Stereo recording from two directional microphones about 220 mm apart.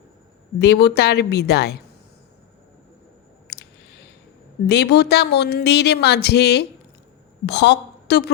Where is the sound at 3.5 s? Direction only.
50° left (ahead or behind).